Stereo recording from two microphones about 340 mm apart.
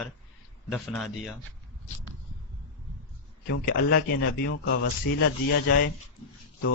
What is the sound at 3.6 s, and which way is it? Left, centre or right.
Speech, left.